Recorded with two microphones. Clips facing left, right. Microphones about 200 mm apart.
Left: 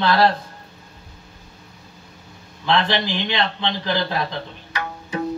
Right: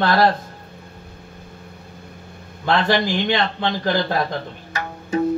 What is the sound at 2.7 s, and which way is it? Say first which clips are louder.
A man's voice: right 2 dB; 50° right (ahead or behind).